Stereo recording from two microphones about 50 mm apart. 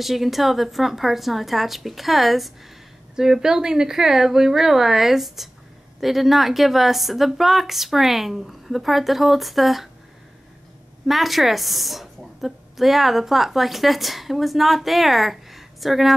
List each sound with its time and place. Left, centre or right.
0.0 s a woman's voice: centre
11.1 s a woman's voice: centre